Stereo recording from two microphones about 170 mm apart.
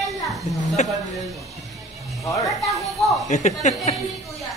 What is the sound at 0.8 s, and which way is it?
Speech, 45° left (ahead or behind).